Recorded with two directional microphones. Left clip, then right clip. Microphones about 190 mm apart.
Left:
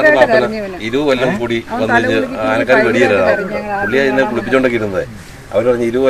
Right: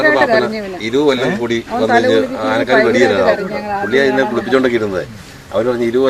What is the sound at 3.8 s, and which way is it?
Speech, 15° left (ahead or behind).